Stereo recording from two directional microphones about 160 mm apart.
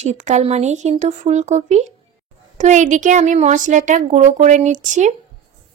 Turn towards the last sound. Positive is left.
turn(degrees=-50)  # may be behind; listen again after turning